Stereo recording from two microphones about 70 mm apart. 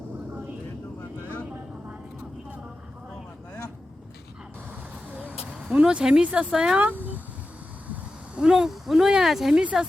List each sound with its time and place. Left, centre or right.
5.7 s speech: centre
6.7 s a sound: right
8.4 s speech: centre